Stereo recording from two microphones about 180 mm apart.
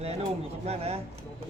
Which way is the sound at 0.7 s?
35° right (ahead or behind).